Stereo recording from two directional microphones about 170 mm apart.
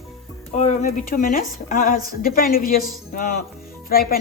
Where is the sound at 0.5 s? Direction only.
45° left (ahead or behind).